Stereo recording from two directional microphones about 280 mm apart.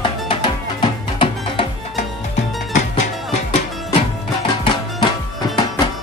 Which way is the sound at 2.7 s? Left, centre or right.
Left.